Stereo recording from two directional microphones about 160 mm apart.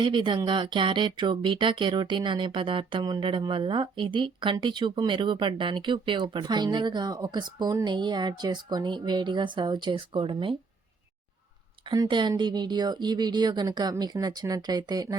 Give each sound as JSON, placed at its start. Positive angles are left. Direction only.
{"t": 0.0, "sound": "speech", "side_deg": -30}
{"t": 11.9, "sound": "speech", "side_deg": -30}